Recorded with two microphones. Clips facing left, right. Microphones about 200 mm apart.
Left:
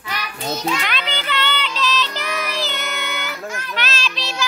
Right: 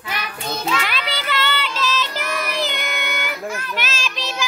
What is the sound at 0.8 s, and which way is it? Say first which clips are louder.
Child singing: even; 5° right (ahead or behind).